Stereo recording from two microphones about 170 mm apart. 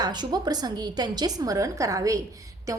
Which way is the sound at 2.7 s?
20° right (ahead or behind).